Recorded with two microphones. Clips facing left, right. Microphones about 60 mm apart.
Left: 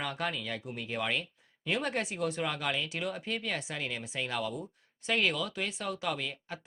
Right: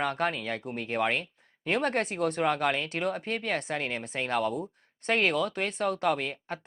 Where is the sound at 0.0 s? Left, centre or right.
Right.